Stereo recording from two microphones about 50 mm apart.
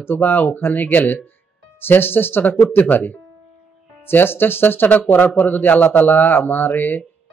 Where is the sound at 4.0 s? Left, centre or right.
Left.